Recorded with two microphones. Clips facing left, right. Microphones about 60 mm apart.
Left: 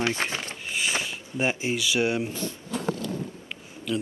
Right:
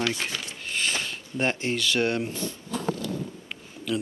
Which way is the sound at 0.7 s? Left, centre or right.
Centre.